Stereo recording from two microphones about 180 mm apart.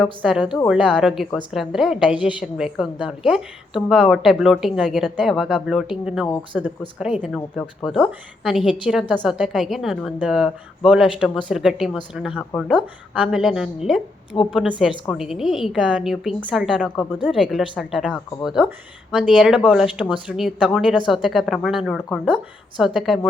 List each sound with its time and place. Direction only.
0.2 s a woman's voice: 5° right (ahead or behind)
14.3 s speech: 25° left (ahead or behind)
15.0 s a woman's voice: 5° left (ahead or behind)